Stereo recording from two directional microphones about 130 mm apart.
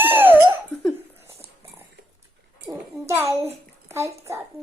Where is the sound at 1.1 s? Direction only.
20° right (ahead or behind).